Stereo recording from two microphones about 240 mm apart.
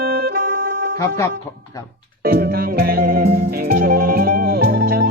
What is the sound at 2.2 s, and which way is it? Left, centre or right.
Music, right.